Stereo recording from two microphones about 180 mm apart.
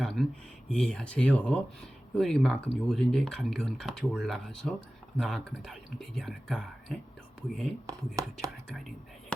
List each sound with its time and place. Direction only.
0.0 s speech: centre (ahead or behind)
7.9 s speech: 20° right (ahead or behind)